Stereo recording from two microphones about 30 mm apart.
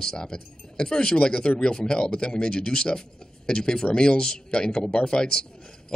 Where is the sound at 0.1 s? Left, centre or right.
Left.